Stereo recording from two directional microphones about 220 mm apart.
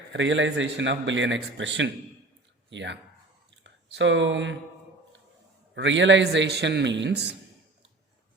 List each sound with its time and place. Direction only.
0.1 s a man's voice: 55° right (ahead or behind)
5.7 s a man's voice: 55° right (ahead or behind)